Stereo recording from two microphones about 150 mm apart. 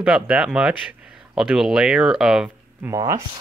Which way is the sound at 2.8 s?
20° right (ahead or behind).